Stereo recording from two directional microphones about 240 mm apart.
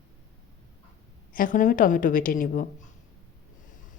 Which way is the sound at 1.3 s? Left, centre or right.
Left.